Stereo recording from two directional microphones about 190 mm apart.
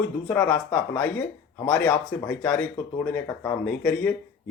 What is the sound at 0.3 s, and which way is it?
Speech, 10° left (ahead or behind).